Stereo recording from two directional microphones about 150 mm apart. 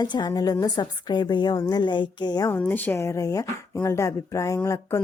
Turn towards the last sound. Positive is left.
turn(degrees=20)  # may be behind; listen again after turning